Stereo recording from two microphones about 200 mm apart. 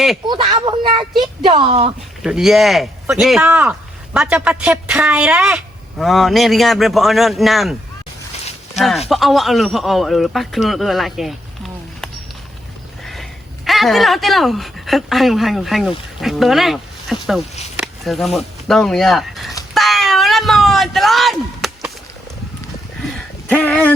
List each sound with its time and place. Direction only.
0.3 s speech: 25° right (ahead or behind)
2.2 s speech: centre (ahead or behind)
9.0 s speech: centre (ahead or behind)
13.7 s speech: centre (ahead or behind)
19.7 s a sound: centre (ahead or behind)
23.1 s a sound: 5° left (ahead or behind)